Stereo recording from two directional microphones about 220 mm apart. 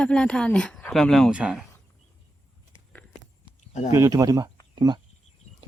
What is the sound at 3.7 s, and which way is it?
Speech, 30° left (ahead or behind).